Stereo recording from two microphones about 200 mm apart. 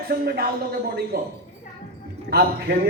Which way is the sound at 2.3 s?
50° right (ahead or behind).